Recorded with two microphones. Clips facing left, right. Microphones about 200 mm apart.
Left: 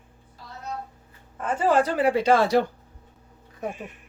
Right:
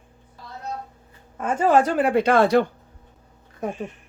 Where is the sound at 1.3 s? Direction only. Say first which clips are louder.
Right 3 dB; 50° right (ahead or behind).